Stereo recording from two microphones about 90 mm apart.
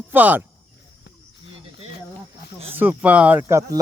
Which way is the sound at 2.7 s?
20° right (ahead or behind).